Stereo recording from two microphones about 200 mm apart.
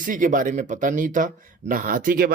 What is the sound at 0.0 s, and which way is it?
Speech, 40° right (ahead or behind).